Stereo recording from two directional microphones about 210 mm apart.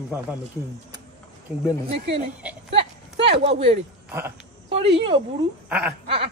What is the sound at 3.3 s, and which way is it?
Speech, 25° right (ahead or behind).